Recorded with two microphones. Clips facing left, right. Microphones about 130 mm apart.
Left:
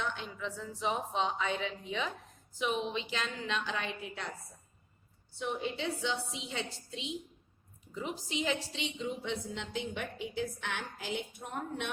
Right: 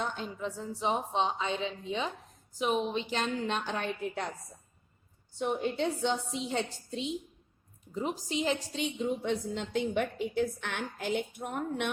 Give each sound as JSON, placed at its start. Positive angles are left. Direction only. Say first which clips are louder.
{"t": 0.0, "sound": "a woman's voice", "louder": "right 3 dB", "side_deg": -40}
{"t": 5.4, "sound": "a woman's voice", "louder": "right 5 dB", "side_deg": -45}
{"t": 7.9, "sound": "a woman's voice", "louder": "right 4 dB", "side_deg": -40}